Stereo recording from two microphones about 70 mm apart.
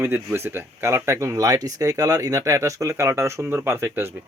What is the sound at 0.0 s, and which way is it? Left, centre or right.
Speech, right.